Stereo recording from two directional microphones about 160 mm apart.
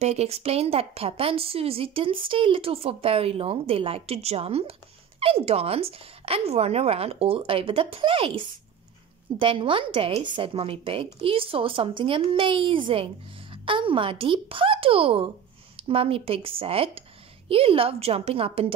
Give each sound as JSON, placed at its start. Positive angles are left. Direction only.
{"t": 0.0, "sound": "a woman's voice", "side_deg": -40}
{"t": 9.4, "sound": "a woman's voice", "side_deg": -30}